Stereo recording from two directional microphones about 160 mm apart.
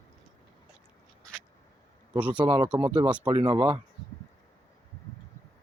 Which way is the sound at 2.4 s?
30° right (ahead or behind).